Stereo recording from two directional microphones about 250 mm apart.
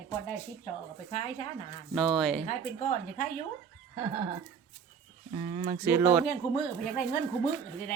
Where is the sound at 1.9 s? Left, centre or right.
Centre.